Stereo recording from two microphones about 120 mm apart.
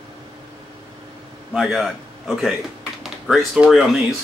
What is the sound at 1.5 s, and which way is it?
A man's voice, centre (ahead or behind).